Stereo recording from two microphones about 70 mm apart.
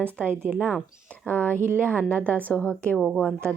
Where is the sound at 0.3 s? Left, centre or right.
Right.